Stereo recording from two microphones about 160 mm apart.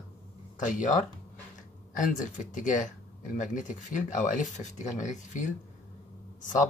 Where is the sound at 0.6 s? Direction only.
50° left (ahead or behind).